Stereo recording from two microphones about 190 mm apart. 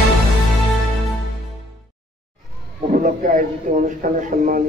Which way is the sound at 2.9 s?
45° right (ahead or behind).